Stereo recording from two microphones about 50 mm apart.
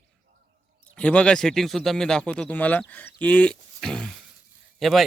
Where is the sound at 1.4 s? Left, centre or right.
Centre.